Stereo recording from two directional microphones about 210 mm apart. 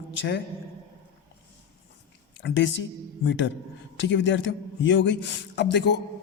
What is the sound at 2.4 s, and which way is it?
A man's voice, 60° left (ahead or behind).